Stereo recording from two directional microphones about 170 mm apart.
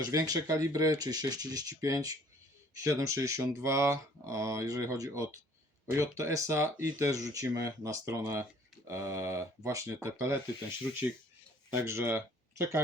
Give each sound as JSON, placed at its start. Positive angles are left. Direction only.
{"t": 0.0, "sound": "speech", "side_deg": -20}
{"t": 11.8, "sound": "speech", "side_deg": -15}